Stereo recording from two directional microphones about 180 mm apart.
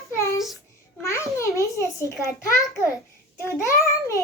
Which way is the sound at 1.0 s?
15° left (ahead or behind).